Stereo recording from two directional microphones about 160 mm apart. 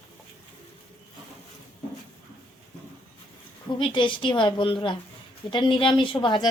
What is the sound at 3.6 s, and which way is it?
A woman's voice, 30° left (ahead or behind).